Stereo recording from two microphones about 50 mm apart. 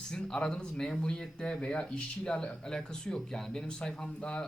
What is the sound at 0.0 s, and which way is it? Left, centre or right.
Speech, centre.